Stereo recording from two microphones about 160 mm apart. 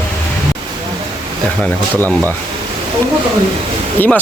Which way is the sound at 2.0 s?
20° right (ahead or behind).